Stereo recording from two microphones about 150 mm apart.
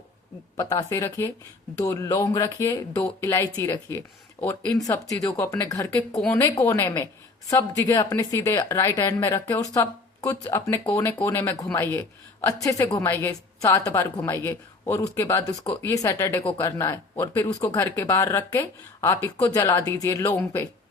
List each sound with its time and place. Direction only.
0.5 s a woman's voice: 25° left (ahead or behind)